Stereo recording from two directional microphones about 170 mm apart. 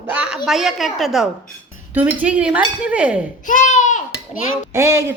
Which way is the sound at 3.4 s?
45° left (ahead or behind).